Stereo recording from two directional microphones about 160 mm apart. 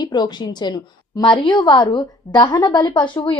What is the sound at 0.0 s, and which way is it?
A woman's voice, 25° left (ahead or behind).